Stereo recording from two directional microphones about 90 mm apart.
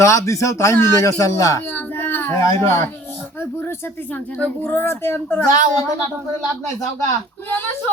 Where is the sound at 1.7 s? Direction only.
25° left (ahead or behind).